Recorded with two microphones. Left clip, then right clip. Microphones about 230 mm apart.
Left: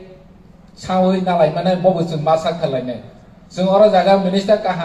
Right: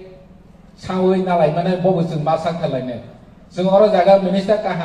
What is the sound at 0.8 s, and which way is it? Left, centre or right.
Speech, left.